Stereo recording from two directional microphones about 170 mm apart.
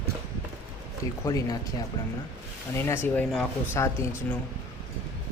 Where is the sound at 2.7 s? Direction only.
15° left (ahead or behind).